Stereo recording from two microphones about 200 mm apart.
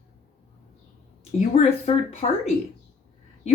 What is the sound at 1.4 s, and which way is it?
Speech, 35° left (ahead or behind).